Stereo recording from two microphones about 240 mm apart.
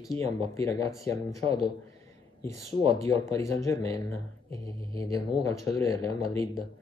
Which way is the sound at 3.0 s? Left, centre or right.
Centre.